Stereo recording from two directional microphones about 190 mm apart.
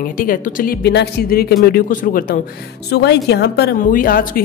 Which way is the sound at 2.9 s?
60° left (ahead or behind).